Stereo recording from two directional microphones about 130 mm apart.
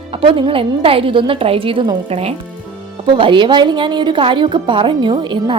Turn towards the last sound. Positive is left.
turn(degrees=-35)  # may be behind; listen again after turning